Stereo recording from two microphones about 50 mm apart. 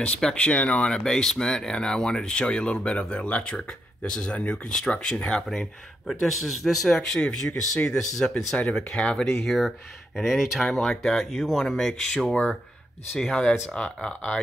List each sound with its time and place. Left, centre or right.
0.2 s speech: centre
0.8 s speech: centre
5.5 s speech: centre